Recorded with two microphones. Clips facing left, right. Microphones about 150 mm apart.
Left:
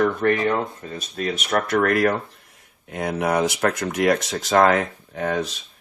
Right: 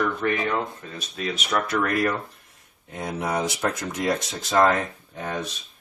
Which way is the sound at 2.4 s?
80° left.